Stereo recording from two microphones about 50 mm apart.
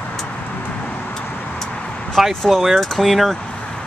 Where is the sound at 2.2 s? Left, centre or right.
Centre.